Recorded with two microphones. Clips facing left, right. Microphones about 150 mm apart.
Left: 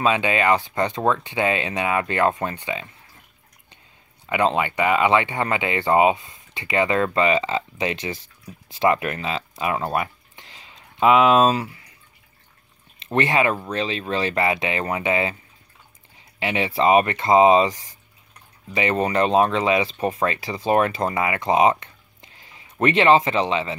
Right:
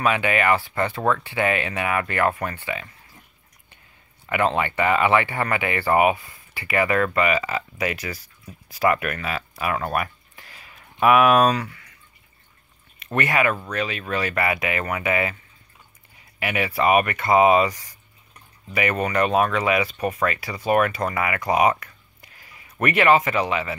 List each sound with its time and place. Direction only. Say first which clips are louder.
0.0 s speech: left 1 dB; 20° left (ahead or behind)
4.3 s speech: left 1 dB; 20° left (ahead or behind)
13.0 s speech: left 2 dB; 25° left (ahead or behind)
16.3 s speech: left 2 dB; 25° left (ahead or behind)